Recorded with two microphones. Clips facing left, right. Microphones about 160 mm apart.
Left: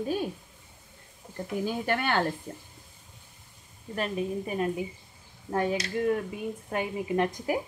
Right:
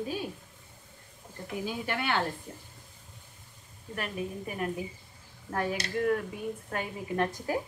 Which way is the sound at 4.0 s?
25° left (ahead or behind).